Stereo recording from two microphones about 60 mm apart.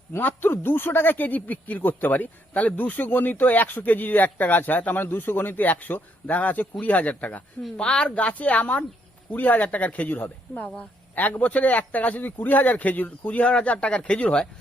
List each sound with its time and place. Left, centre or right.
0.2 s speech: left